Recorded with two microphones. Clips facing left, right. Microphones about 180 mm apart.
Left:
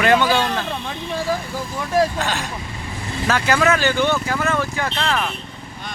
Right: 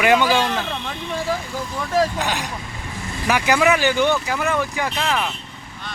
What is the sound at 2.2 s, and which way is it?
Speech, 15° right (ahead or behind).